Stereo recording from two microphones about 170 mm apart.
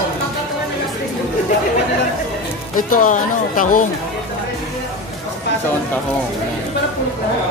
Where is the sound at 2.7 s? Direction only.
55° left (ahead or behind).